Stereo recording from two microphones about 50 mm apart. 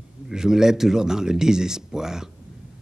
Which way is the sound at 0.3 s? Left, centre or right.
Centre.